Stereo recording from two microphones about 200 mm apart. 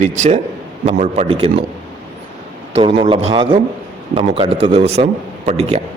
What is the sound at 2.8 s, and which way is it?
A man's voice, 25° right (ahead or behind).